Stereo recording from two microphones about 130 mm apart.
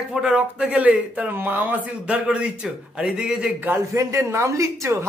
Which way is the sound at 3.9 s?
25° right (ahead or behind).